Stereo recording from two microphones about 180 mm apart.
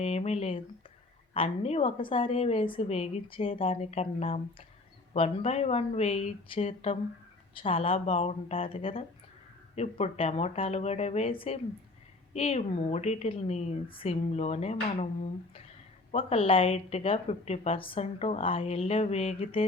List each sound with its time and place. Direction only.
0.0 s a woman's voice: 35° left (ahead or behind)